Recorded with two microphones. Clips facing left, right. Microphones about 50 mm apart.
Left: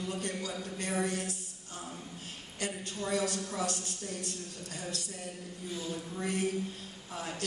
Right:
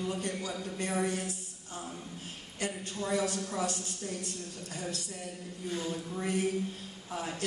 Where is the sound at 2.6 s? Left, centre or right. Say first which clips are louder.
Right 1 dB; right.